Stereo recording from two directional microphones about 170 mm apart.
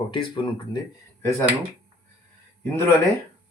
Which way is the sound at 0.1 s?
30° left (ahead or behind).